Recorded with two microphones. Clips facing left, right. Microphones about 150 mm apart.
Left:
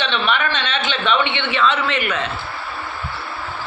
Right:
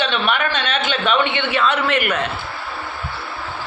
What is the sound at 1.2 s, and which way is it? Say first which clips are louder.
Speech: right 2 dB; 45° right (ahead or behind).